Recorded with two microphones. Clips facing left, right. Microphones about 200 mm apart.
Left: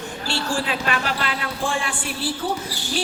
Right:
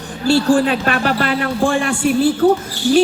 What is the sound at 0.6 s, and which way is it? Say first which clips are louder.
Speech: right 8 dB; 55° right (ahead or behind).